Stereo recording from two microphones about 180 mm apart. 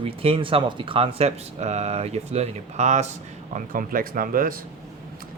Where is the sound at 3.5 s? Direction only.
50° right (ahead or behind).